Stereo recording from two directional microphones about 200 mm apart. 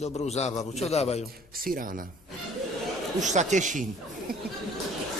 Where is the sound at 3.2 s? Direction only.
35° right (ahead or behind).